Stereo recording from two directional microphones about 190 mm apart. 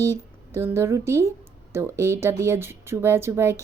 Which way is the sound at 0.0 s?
15° right (ahead or behind).